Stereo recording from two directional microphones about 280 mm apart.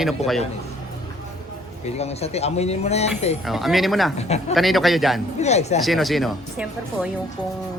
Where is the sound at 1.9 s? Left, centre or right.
Left.